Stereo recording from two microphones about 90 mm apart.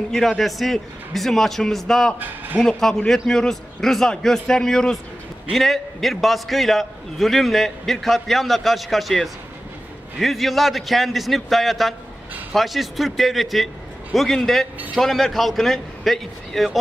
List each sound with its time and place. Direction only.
0.1 s a man's voice: 5° left (ahead or behind)
2.1 s a man's voice: 20° right (ahead or behind)
2.6 s a man's voice: 5° left (ahead or behind)